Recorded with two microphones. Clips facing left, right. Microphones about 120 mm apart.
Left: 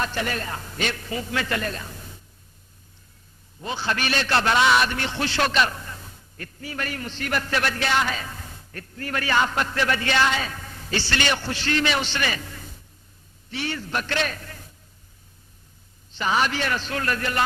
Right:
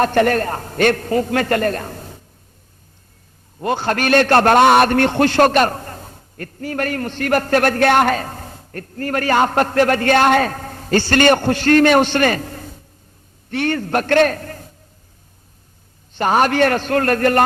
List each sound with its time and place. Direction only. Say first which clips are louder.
0.0 s a man's voice: right 12 dB; 55° right (ahead or behind)
3.6 s a man's voice: right 8 dB; 55° right (ahead or behind)
16.1 s a man's voice: right 8 dB; 50° right (ahead or behind)